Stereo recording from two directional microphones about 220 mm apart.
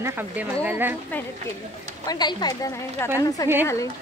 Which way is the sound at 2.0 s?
20° left (ahead or behind).